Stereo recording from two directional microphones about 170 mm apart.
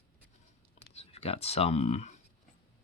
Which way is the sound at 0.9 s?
35° left (ahead or behind).